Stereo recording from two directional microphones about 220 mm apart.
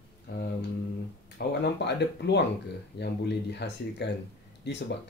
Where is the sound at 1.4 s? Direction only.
50° left (ahead or behind).